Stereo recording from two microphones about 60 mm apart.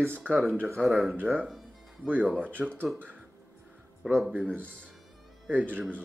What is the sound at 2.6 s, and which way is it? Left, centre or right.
Speech, centre.